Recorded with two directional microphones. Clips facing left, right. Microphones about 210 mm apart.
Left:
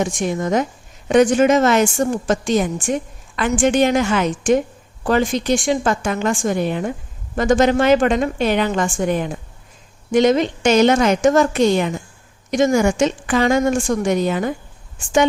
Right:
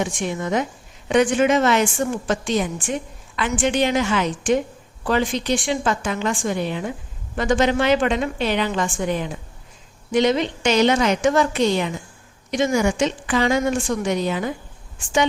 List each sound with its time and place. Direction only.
0.0 s a woman's voice: 45° left (ahead or behind)